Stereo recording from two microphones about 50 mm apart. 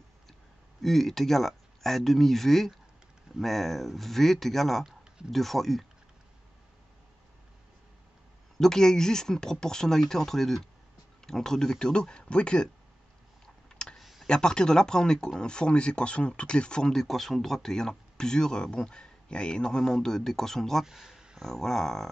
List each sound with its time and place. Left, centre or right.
0.8 s speech: centre
8.5 s speech: centre
13.7 s a sound: centre
13.9 s computer keyboard: centre
14.2 s speech: centre
20.8 s a sound: centre
21.4 s speech: centre